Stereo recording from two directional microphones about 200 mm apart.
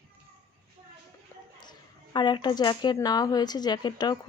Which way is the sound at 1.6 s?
20° left (ahead or behind).